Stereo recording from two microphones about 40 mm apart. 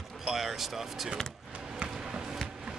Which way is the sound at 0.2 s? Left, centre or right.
Centre.